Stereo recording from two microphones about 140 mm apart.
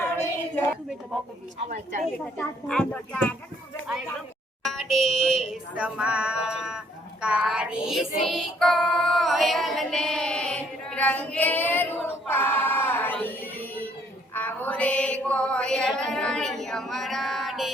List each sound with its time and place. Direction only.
1.6 s a woman's voice: 65° right (ahead or behind)
2.1 s speech: 10° left (ahead or behind)
4.6 s a sound: centre (ahead or behind)